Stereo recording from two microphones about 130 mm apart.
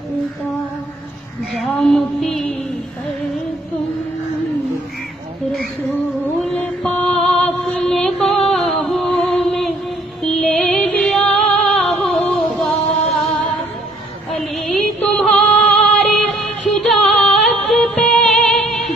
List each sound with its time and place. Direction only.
1.8 s music: centre (ahead or behind)
5.9 s a sound: 15° left (ahead or behind)
6.5 s mantra: 10° left (ahead or behind)
7.9 s music: 5° left (ahead or behind)